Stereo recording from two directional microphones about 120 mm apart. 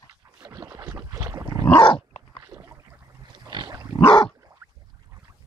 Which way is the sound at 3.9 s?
40° left (ahead or behind).